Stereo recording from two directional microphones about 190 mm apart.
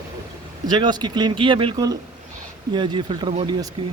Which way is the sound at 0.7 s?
25° right (ahead or behind).